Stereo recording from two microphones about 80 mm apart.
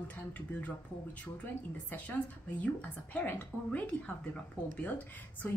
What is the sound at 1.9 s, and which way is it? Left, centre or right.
A woman's voice, centre.